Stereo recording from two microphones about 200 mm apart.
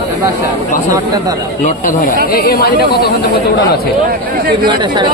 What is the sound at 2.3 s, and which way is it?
Speech, 50° left (ahead or behind).